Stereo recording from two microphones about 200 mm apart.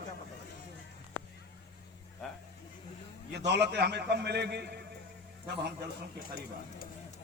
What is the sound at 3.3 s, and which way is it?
A man's voice, 60° right (ahead or behind).